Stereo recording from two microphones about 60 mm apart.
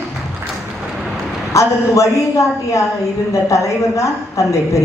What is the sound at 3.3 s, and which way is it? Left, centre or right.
A woman's voice, left.